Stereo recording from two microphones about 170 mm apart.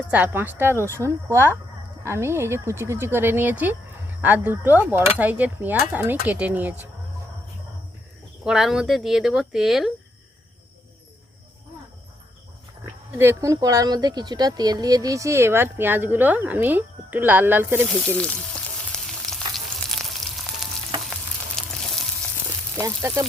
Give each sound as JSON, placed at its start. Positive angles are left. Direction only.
{"t": 0.1, "sound": "speech", "side_deg": -10}
{"t": 8.4, "sound": "speech", "side_deg": -5}
{"t": 13.1, "sound": "speech", "side_deg": -15}
{"t": 18.2, "sound": "speech", "side_deg": 5}
{"t": 18.9, "sound": "frying", "side_deg": 5}
{"t": 21.6, "sound": "frying", "side_deg": 5}
{"t": 22.8, "sound": "speech", "side_deg": -20}